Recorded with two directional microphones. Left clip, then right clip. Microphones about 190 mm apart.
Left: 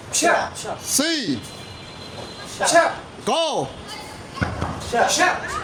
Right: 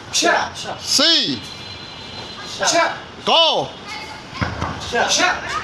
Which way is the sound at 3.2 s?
20° left (ahead or behind).